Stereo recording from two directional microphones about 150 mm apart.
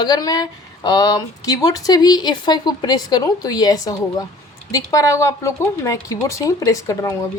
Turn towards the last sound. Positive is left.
turn(degrees=20)  # may be behind; listen again after turning